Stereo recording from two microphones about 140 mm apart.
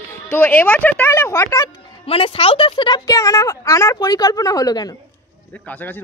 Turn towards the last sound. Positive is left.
turn(degrees=25)  # may be behind; listen again after turning